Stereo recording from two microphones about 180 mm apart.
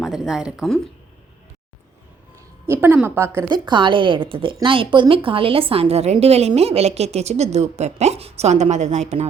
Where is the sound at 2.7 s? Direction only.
10° right (ahead or behind).